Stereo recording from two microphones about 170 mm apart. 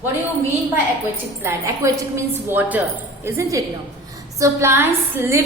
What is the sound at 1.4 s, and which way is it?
A woman's voice, 15° right (ahead or behind).